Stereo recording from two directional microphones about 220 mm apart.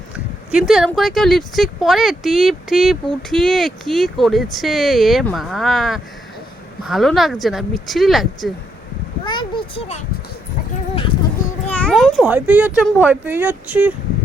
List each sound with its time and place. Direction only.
0.5 s speech: centre (ahead or behind)
9.2 s a sound: 20° left (ahead or behind)
11.7 s speech: 5° left (ahead or behind)